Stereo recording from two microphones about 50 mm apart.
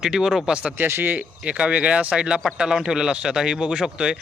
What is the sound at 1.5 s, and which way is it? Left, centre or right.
Speech, right.